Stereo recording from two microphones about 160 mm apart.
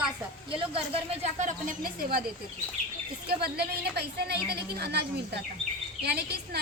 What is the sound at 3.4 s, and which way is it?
A woman's voice, 85° right.